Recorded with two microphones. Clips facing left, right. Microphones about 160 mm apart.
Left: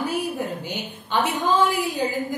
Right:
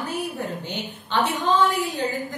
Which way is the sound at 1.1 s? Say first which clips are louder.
Even; 10° left (ahead or behind).